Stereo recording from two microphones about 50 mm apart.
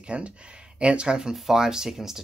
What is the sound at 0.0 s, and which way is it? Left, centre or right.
Speech, right.